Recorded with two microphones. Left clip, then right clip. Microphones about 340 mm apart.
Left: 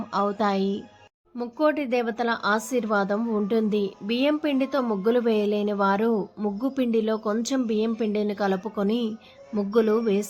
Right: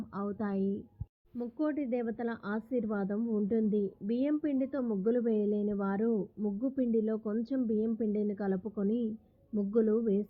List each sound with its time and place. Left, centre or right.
0.1 s speech: centre